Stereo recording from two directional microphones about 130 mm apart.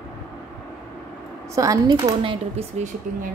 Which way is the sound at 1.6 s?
25° right (ahead or behind).